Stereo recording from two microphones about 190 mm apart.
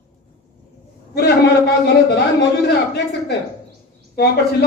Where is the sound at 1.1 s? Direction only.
60° left (ahead or behind).